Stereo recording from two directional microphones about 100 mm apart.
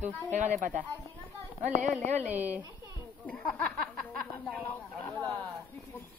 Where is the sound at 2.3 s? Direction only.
20° right (ahead or behind).